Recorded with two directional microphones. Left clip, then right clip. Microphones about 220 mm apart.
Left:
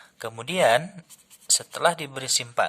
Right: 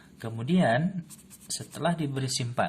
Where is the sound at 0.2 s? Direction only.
30° left (ahead or behind).